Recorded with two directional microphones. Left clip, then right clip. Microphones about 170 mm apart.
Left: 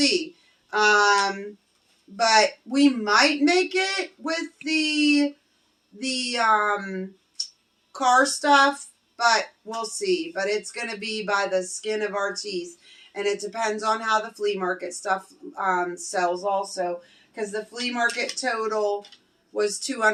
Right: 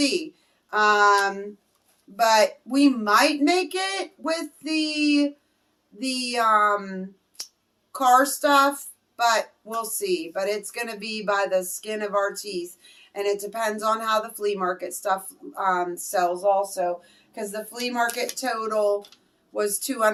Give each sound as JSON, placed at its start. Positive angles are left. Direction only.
{"t": 0.7, "sound": "a woman's voice", "side_deg": -15}